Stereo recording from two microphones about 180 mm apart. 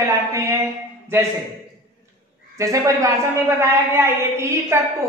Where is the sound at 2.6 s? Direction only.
15° right (ahead or behind).